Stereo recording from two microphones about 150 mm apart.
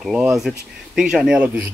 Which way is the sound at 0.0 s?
5° right (ahead or behind).